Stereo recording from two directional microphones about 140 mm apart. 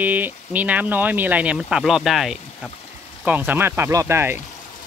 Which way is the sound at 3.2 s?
10° right (ahead or behind).